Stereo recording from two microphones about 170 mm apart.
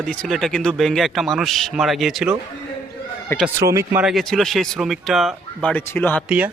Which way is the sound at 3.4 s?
15° right (ahead or behind).